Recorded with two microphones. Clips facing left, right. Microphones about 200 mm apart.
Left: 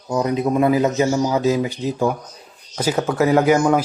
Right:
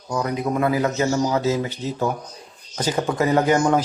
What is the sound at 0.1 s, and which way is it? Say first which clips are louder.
Speech: left 4 dB; 20° left (ahead or behind).